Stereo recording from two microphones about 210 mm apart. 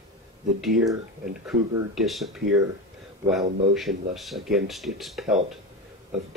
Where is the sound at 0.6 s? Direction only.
Centre (ahead or behind).